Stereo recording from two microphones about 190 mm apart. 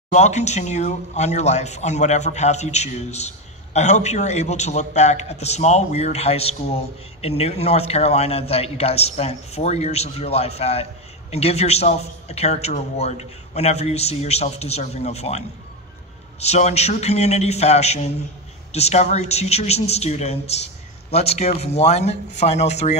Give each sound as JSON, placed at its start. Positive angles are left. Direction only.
{"t": 0.1, "sound": "speech", "side_deg": 35}